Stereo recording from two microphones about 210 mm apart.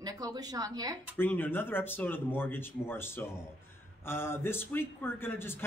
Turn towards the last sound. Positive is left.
turn(degrees=10)  # may be behind; listen again after turning